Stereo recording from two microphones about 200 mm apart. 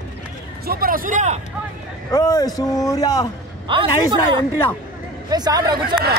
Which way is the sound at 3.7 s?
25° right (ahead or behind).